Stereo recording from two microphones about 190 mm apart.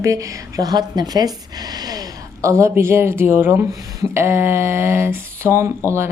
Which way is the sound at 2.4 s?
15° right (ahead or behind).